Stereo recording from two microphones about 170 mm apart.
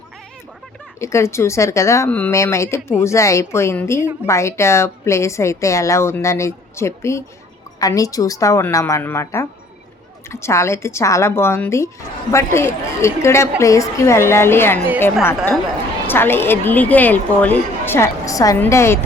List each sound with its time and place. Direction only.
0.9 s a woman's voice: 15° left (ahead or behind)
16.0 s a woman's voice: 15° left (ahead or behind)